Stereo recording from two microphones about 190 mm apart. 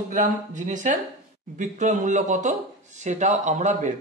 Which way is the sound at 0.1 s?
40° right (ahead or behind).